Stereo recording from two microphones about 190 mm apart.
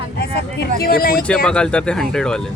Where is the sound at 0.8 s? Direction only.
50° left (ahead or behind).